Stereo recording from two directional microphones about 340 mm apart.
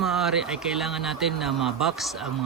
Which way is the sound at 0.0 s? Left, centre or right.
Centre.